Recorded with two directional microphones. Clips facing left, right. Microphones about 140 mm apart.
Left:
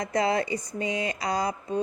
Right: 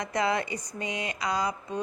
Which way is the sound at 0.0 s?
35° left (ahead or behind).